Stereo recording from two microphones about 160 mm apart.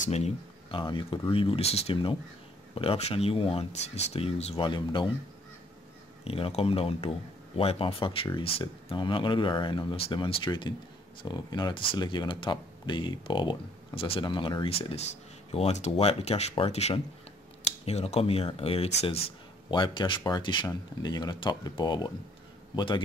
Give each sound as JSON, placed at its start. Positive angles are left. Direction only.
{"t": 0.0, "sound": "speech", "side_deg": 40}
{"t": 6.2, "sound": "a man's voice", "side_deg": 35}